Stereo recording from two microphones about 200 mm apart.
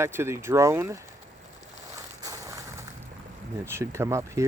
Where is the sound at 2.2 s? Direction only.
15° right (ahead or behind).